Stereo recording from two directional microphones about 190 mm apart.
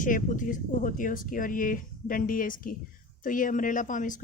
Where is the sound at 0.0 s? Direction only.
45° left (ahead or behind).